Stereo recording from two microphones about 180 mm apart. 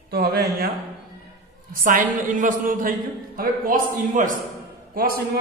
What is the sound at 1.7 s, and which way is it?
A man's voice, 50° right (ahead or behind).